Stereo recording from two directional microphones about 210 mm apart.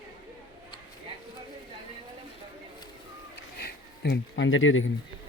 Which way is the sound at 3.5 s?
50° left (ahead or behind).